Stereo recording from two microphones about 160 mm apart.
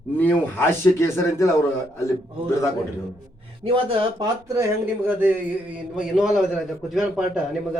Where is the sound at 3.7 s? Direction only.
35° right (ahead or behind).